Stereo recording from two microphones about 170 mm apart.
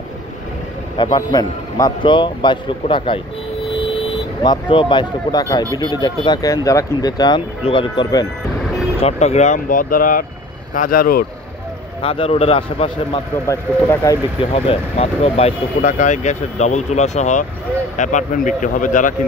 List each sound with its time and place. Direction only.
1.1 s speech: 25° left (ahead or behind)
4.4 s speech: 25° left (ahead or behind)
9.0 s speech: 40° left (ahead or behind); by 11.2 s 60° left (ahead or behind)
12.0 s a man's voice: 35° left (ahead or behind)
13.5 s speech: 15° left (ahead or behind)
14.4 s speech: 35° left (ahead or behind); by 19.1 s 50° left (ahead or behind)